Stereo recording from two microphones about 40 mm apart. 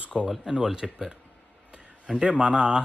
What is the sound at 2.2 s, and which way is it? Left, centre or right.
Speech, right.